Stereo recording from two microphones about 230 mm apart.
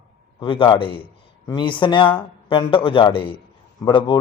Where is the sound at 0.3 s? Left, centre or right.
Left.